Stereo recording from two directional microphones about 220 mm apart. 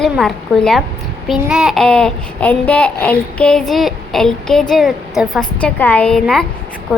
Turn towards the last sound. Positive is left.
turn(degrees=0)  # may be behind; listen again after turning